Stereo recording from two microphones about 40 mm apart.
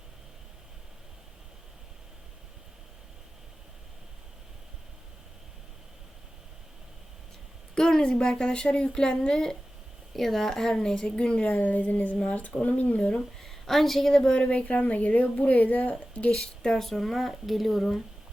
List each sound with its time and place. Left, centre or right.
7.8 s a woman's voice: centre
9.3 s a woman's voice: centre
11.2 s a woman's voice: left
11.6 s speech: left
13.1 s speech: centre
14.1 s a woman's voice: centre
14.5 s speech: left
16.7 s speech: centre